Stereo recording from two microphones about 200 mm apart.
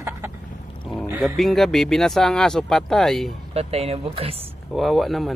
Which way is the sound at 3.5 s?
30° right (ahead or behind).